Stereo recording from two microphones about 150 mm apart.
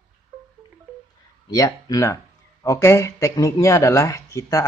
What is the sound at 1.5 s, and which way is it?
Speech, 20° left (ahead or behind).